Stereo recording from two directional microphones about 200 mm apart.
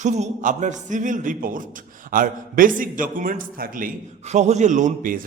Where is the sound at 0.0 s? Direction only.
35° right (ahead or behind).